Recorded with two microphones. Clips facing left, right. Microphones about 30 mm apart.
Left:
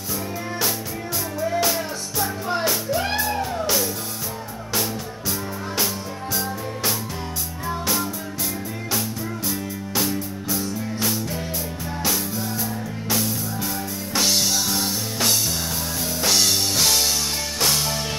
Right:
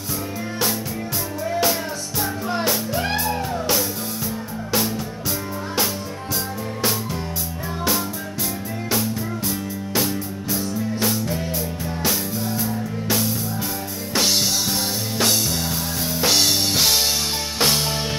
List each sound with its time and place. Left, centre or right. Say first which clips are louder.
1.4 s music: right 1 dB; centre
7.8 s music: right 4 dB; centre